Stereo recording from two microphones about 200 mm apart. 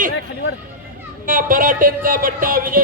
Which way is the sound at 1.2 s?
45° right (ahead or behind).